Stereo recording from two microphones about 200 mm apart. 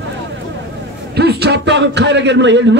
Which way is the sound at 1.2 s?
55° right (ahead or behind).